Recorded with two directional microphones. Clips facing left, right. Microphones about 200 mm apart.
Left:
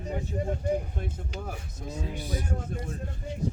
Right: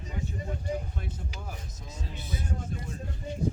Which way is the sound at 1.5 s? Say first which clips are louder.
Left 5 dB; 55° left (ahead or behind).